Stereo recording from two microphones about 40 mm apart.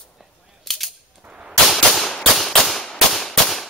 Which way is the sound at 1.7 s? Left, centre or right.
Centre.